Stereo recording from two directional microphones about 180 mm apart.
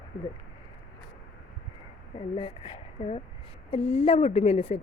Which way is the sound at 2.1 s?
30° left (ahead or behind).